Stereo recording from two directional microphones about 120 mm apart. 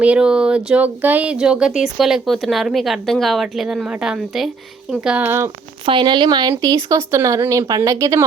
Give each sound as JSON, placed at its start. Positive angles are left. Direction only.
{"t": 0.0, "sound": "speech", "side_deg": -10}
{"t": 5.8, "sound": "speech", "side_deg": -45}